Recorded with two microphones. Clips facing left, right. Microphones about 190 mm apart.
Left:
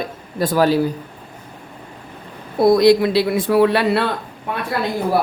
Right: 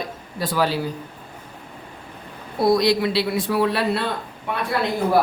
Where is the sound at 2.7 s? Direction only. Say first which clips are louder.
Left 7 dB; 50° left (ahead or behind).